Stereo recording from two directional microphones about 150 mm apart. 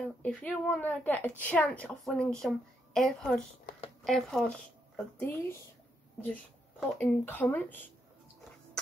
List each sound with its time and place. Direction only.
0.0 s a woman's voice: 10° left (ahead or behind)
7.0 s speech: 10° left (ahead or behind)